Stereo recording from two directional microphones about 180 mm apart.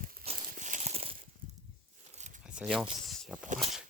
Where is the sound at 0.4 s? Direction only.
45° right (ahead or behind).